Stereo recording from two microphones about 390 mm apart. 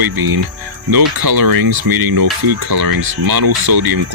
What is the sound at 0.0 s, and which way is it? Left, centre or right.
Speech, right.